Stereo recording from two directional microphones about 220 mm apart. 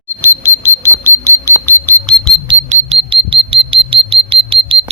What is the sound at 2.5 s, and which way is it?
Alarm, 25° right (ahead or behind).